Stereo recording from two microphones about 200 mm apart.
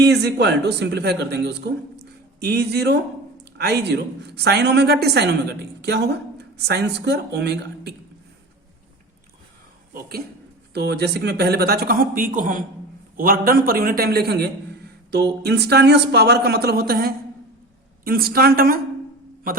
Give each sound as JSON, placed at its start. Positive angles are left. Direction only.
{"t": 0.0, "sound": "speech", "side_deg": -55}
{"t": 9.9, "sound": "speech", "side_deg": -50}